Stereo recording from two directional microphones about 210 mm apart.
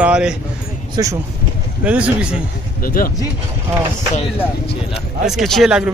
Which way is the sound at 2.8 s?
45° left (ahead or behind).